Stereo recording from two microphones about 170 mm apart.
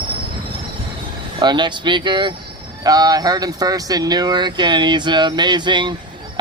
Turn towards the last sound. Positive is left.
turn(degrees=-25)  # may be behind; listen again after turning